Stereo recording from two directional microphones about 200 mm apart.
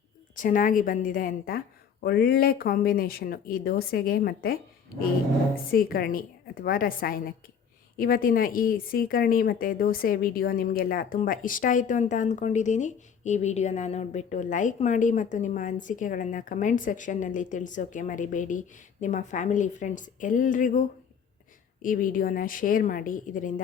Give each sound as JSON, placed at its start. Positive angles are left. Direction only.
{"t": 0.3, "sound": "a woman's voice", "side_deg": 40}
{"t": 5.7, "sound": "a woman's voice", "side_deg": 45}